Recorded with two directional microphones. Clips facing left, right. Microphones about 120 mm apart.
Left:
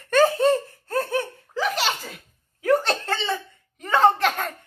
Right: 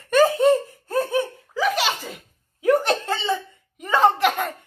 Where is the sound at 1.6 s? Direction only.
5° right (ahead or behind).